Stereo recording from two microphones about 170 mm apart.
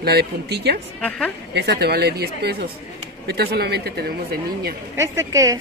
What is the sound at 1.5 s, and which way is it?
Speech, 75° right (ahead or behind).